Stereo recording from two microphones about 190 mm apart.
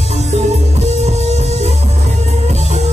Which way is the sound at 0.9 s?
35° right (ahead or behind).